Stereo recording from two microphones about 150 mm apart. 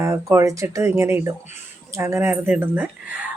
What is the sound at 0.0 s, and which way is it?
A woman's voice, 20° right (ahead or behind).